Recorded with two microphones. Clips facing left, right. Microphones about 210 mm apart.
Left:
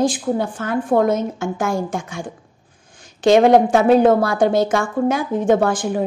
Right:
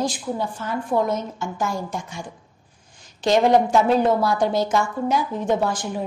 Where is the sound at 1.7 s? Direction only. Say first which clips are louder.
Left 6 dB; 50° left (ahead or behind).